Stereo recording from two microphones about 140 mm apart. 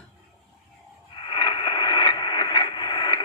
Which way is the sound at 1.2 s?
30° left (ahead or behind).